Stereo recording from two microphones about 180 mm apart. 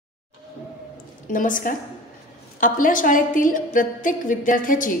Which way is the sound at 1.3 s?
50° left (ahead or behind).